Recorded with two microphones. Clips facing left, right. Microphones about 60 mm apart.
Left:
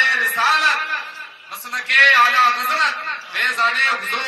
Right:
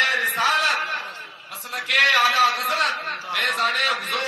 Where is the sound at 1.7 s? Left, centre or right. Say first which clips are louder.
Left 6 dB; left.